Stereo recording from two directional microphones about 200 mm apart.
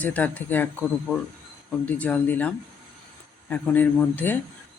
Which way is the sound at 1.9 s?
10° left (ahead or behind).